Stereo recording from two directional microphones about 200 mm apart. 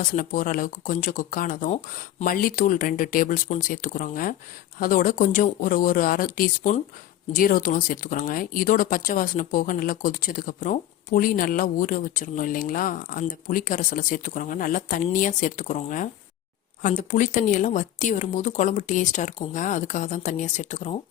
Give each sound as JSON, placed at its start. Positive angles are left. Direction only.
{"t": 0.0, "sound": "speech", "side_deg": 45}